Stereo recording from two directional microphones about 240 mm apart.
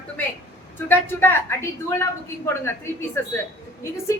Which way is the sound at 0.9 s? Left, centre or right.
Centre.